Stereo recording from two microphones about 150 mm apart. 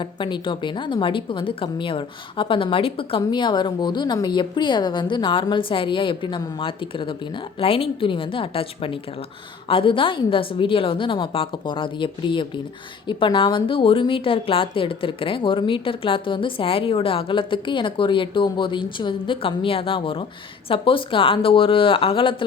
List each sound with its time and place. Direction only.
0.0 s a woman's voice: 35° left (ahead or behind)